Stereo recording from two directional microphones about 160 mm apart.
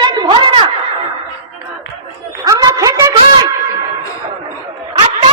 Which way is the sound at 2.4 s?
20° right (ahead or behind).